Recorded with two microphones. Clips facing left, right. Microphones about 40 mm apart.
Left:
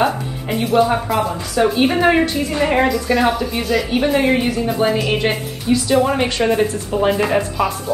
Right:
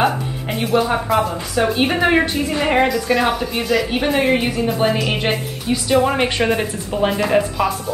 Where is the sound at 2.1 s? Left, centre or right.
Right.